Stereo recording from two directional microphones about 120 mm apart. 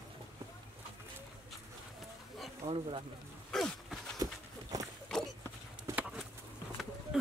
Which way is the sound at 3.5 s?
5° left (ahead or behind).